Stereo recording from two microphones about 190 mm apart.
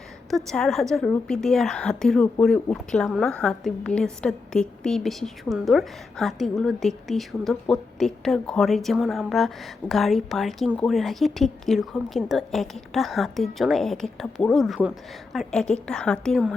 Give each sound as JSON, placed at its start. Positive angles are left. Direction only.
{"t": 0.3, "sound": "a woman's voice", "side_deg": 0}